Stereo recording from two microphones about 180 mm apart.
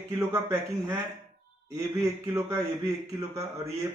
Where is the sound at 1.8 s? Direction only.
20° right (ahead or behind).